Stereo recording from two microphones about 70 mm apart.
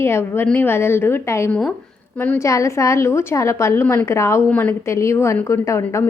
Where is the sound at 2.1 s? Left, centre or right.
Left.